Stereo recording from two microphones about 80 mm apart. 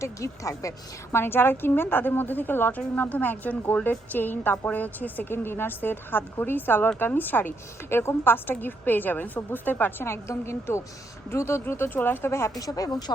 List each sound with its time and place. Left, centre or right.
0.0 s speech: left
1.1 s a woman's voice: left
12.5 s speech: left